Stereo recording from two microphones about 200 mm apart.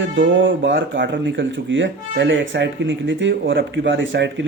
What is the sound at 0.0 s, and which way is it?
A man's voice, 65° right (ahead or behind).